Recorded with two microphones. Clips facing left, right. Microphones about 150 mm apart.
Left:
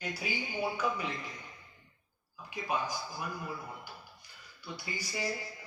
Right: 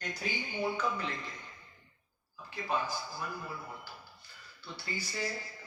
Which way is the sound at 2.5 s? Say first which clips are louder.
Even; 15° left (ahead or behind).